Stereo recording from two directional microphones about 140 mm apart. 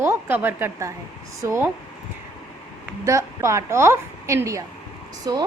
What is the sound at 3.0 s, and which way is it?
A woman's voice, 20° right (ahead or behind).